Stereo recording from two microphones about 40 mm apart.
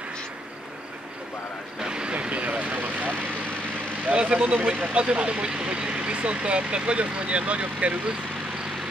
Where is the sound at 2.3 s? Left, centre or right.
Right.